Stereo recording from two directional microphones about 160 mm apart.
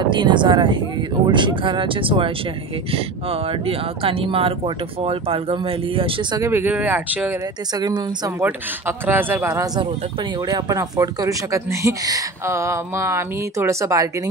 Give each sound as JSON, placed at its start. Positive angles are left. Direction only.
{"t": 0.1, "sound": "speech", "side_deg": -30}
{"t": 6.4, "sound": "speech", "side_deg": -15}
{"t": 7.7, "sound": "speech", "side_deg": -25}
{"t": 8.4, "sound": "speech", "side_deg": -15}
{"t": 9.8, "sound": "speech", "side_deg": -30}